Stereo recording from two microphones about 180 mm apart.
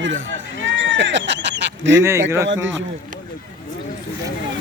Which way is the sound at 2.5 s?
90° right.